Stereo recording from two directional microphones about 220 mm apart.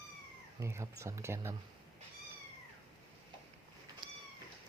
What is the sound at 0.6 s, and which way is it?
Speech, 15° right (ahead or behind).